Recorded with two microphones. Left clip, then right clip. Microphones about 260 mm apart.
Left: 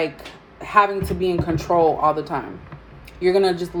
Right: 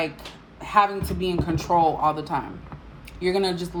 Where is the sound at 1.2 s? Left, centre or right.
Centre.